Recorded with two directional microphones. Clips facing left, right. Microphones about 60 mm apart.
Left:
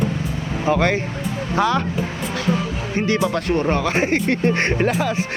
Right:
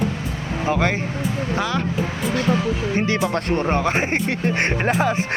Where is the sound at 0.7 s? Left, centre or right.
Centre.